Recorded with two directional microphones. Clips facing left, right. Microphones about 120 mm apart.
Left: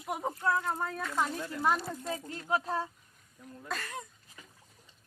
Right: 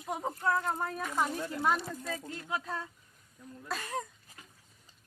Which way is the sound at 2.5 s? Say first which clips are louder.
Left 6 dB; 35° left (ahead or behind).